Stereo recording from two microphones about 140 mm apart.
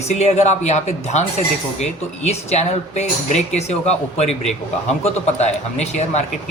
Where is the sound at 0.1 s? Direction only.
55° left (ahead or behind).